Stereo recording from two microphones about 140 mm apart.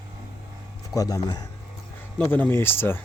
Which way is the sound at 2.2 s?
15° left (ahead or behind).